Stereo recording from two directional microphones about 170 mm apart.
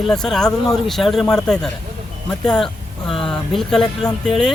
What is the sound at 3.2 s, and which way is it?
Speech, centre (ahead or behind).